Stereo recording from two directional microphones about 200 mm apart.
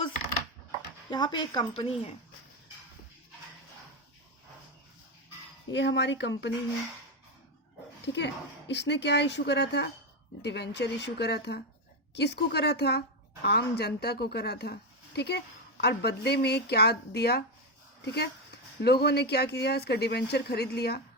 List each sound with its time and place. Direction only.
1.1 s a woman's voice: 20° left (ahead or behind)
5.7 s speech: 60° left (ahead or behind)
8.0 s a woman's voice: 60° left (ahead or behind)